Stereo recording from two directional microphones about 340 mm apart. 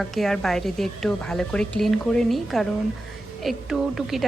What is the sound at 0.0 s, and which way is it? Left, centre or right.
A woman's voice, centre.